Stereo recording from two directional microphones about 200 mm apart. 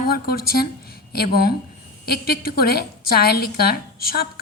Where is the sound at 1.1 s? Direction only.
50° left (ahead or behind).